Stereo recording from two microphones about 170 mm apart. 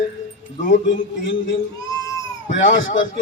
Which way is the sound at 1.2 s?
90° left.